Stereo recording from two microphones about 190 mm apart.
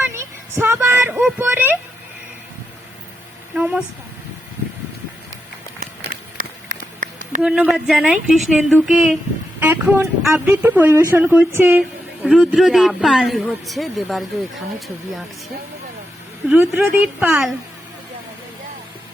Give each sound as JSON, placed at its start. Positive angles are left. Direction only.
{"t": 0.0, "sound": "speech", "side_deg": -15}
{"t": 3.5, "sound": "speech", "side_deg": -5}
{"t": 6.3, "sound": "run", "side_deg": -45}
{"t": 7.4, "sound": "speech", "side_deg": -5}
{"t": 16.6, "sound": "speech", "side_deg": -10}